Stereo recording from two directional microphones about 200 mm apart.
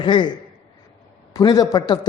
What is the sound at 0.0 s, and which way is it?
Speech, 25° left (ahead or behind).